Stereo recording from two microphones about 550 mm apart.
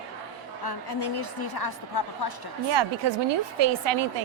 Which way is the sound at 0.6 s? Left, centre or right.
Left.